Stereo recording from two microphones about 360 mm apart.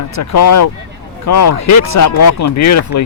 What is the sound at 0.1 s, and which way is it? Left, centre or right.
Speech, left.